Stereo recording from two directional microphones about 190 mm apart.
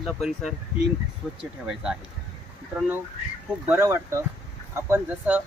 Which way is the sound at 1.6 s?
5° right (ahead or behind).